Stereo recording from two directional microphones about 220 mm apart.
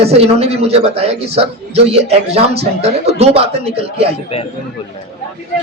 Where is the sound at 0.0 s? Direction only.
25° right (ahead or behind).